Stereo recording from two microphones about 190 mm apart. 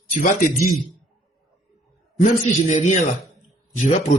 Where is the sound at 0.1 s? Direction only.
45° left (ahead or behind).